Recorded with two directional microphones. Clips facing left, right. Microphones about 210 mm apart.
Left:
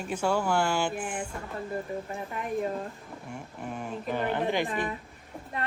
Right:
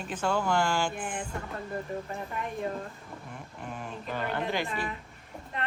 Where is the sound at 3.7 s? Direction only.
10° left (ahead or behind).